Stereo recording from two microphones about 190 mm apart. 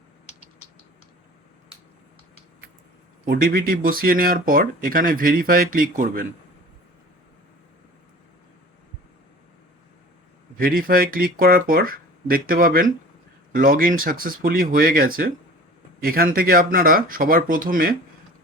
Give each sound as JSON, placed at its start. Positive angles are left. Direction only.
{"t": 3.2, "sound": "speech", "side_deg": -50}
{"t": 10.6, "sound": "speech", "side_deg": -50}